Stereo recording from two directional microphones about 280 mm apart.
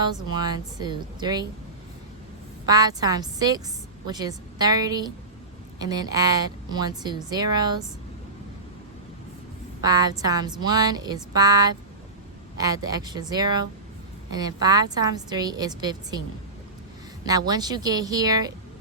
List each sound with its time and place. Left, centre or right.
0.0 s a woman's voice: centre
2.6 s a woman's voice: centre
9.8 s a woman's voice: centre
17.2 s a woman's voice: centre